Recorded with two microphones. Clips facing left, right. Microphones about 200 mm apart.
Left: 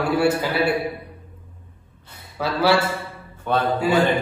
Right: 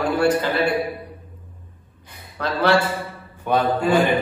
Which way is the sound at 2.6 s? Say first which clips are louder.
Right 1 dB; 5° left (ahead or behind).